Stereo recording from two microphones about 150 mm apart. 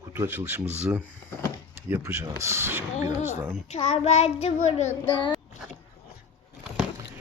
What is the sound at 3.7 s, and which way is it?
A child's voice, 45° left (ahead or behind).